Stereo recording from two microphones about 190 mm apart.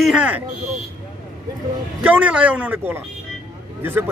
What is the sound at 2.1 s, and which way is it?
A man's voice, 5° right (ahead or behind).